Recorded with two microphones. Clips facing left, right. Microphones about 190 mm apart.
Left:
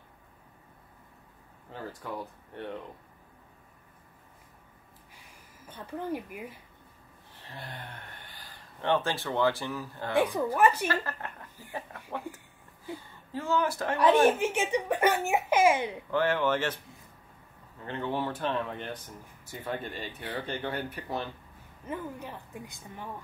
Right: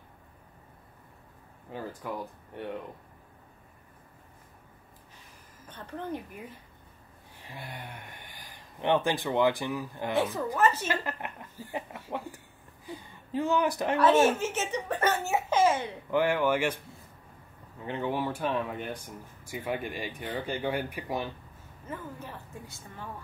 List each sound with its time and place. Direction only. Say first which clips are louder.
1.7 s speech: right 2 dB; 15° right (ahead or behind)
5.7 s speech: left 2 dB; 10° left (ahead or behind)
7.3 s speech: right 1 dB; 10° right (ahead or behind)
10.1 s speech: left 3 dB; 15° left (ahead or behind)
10.9 s speech: even; 15° right (ahead or behind)
12.8 s speech: left 2 dB; 15° right (ahead or behind)
13.9 s speech: left 1 dB; 15° left (ahead or behind)
16.1 s speech: right 2 dB; 10° right (ahead or behind)
17.8 s speech: right 1 dB; 15° right (ahead or behind)
21.8 s speech: left 3 dB; 15° left (ahead or behind)